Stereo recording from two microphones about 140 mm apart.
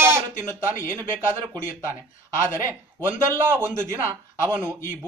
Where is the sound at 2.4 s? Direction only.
15° right (ahead or behind).